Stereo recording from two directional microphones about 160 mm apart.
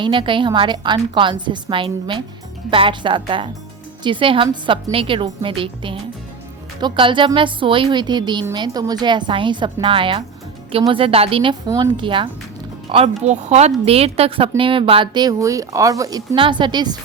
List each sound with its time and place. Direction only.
0.0 s a woman's voice: 30° right (ahead or behind)
13.2 s a woman's voice: 45° right (ahead or behind); by 17.0 s 25° right (ahead or behind)